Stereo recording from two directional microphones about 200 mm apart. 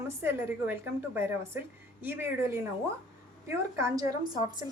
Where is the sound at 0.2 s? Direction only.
10° right (ahead or behind).